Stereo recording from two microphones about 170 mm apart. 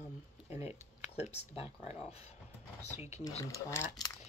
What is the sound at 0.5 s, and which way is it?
Speech, 40° left (ahead or behind).